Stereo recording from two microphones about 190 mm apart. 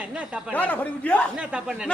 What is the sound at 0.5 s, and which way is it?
Speech, 5° left (ahead or behind).